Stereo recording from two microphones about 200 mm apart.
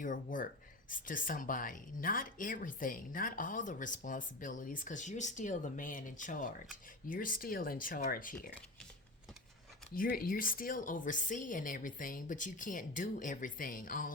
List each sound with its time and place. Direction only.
0.0 s speech: 40° left (ahead or behind)
9.9 s speech: 45° left (ahead or behind)